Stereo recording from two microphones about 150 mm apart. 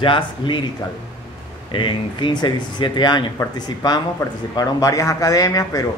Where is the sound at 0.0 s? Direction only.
35° left (ahead or behind).